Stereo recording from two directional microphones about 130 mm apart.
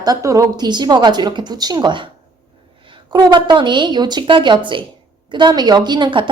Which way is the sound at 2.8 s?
40° right (ahead or behind).